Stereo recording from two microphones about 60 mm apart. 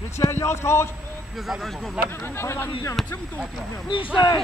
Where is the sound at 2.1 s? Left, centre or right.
Left.